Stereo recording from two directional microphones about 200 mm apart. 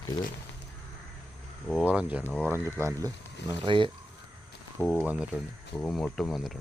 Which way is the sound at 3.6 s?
25° right (ahead or behind).